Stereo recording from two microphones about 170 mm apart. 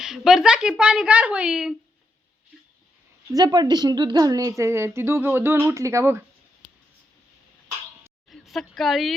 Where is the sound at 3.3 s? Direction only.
25° right (ahead or behind).